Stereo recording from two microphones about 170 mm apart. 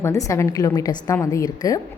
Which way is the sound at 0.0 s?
20° left (ahead or behind).